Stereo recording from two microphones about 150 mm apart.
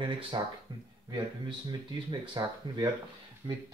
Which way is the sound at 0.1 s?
35° right (ahead or behind).